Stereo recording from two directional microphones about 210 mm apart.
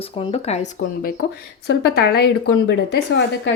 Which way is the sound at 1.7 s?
50° left (ahead or behind).